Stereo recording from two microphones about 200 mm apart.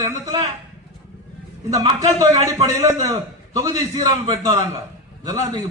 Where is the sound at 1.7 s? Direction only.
15° right (ahead or behind).